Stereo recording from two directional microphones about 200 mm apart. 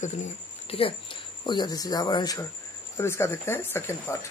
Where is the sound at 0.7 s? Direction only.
25° left (ahead or behind); by 4.2 s 10° left (ahead or behind).